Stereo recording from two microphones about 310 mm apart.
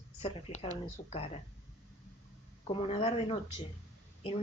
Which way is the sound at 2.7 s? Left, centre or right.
Centre.